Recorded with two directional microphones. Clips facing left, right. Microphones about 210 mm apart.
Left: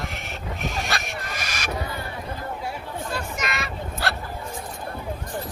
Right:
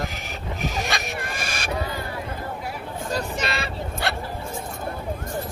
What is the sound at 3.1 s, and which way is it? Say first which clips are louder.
Vehicle: right 5 dB; 30° right (ahead or behind).